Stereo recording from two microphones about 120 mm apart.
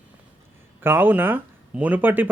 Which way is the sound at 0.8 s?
15° right (ahead or behind).